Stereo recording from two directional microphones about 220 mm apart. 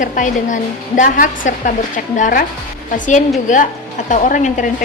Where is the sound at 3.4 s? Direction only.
35° left (ahead or behind).